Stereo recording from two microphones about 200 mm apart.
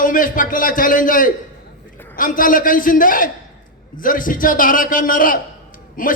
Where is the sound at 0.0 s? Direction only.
45° left (ahead or behind).